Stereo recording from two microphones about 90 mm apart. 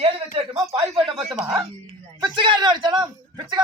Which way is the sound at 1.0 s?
90° right.